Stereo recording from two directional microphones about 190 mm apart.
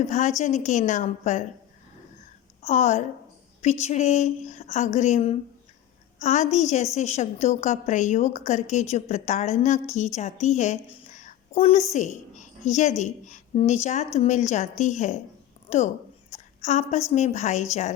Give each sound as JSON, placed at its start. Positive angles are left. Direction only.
{"t": 0.0, "sound": "a woman's voice", "side_deg": 40}
{"t": 2.6, "sound": "a woman's voice", "side_deg": 35}
{"t": 11.1, "sound": "a sound", "side_deg": 40}
{"t": 13.0, "sound": "a woman's voice", "side_deg": 40}